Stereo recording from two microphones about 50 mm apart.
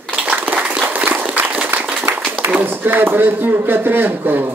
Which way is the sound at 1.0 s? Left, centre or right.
Right.